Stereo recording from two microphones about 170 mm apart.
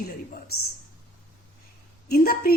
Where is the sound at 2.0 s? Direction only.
65° left (ahead or behind).